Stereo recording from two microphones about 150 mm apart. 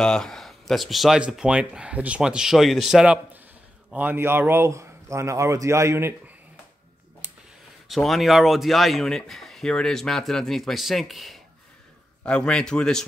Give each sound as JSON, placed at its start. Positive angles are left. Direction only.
{"t": 0.0, "sound": "speech", "side_deg": 5}
{"t": 7.9, "sound": "a man's voice", "side_deg": 0}